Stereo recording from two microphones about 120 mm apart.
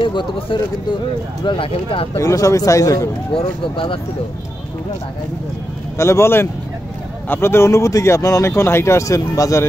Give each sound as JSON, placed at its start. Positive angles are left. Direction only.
{"t": 0.0, "sound": "speech", "side_deg": 45}
{"t": 2.1, "sound": "speech", "side_deg": 25}
{"t": 3.3, "sound": "speech", "side_deg": 45}
{"t": 5.9, "sound": "speech", "side_deg": 25}